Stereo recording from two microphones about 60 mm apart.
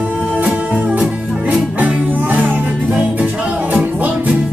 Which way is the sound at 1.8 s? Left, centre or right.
Right.